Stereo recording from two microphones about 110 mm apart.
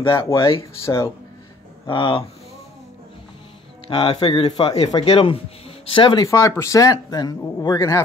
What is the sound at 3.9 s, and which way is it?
Speech, 60° left (ahead or behind).